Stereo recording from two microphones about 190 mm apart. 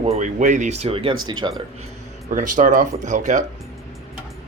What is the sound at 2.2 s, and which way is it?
Speech, 45° right (ahead or behind).